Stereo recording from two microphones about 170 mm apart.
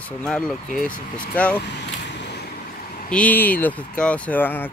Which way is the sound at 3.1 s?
10° left (ahead or behind).